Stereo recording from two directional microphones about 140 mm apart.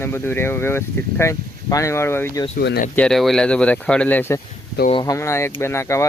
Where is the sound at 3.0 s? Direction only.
5° left (ahead or behind).